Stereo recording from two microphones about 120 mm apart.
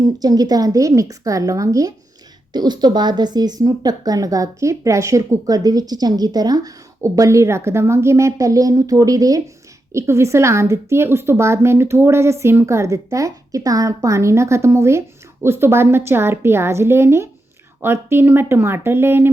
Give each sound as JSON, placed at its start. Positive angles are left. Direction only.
{"t": 0.2, "sound": "a woman's voice", "side_deg": -35}